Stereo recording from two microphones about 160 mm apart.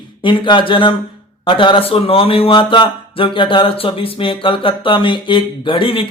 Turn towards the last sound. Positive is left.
turn(degrees=35)  # may be behind; listen again after turning